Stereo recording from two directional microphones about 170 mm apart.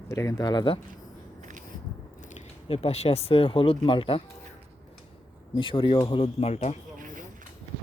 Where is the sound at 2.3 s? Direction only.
35° left (ahead or behind).